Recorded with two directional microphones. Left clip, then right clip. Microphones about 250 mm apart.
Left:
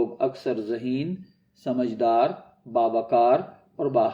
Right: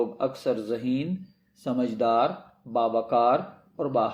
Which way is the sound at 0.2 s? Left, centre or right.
Centre.